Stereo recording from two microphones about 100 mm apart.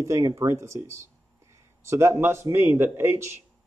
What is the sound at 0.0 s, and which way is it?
A man's voice, 35° right (ahead or behind).